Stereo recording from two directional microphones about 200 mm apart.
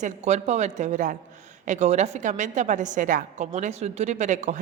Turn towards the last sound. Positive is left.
turn(degrees=-35)  # may be behind; listen again after turning